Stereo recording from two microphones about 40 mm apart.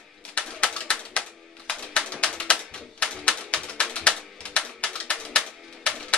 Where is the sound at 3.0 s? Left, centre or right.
Left.